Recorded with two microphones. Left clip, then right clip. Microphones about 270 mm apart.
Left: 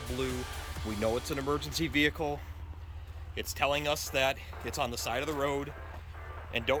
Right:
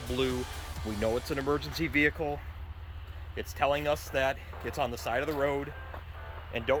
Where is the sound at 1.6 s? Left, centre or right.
Left.